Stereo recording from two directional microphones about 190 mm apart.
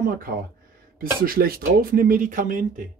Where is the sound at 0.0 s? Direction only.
50° right (ahead or behind).